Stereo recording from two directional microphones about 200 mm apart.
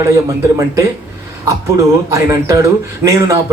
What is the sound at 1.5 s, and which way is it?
Speech, 15° right (ahead or behind).